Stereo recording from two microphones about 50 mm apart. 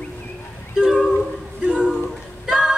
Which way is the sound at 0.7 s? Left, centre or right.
Centre.